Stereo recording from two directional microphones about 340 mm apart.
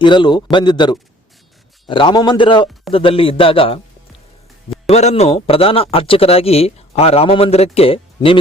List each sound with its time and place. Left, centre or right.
0.0 s speech: centre
4.9 s speech: centre